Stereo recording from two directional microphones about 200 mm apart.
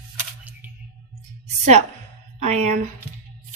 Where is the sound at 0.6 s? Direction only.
10° right (ahead or behind).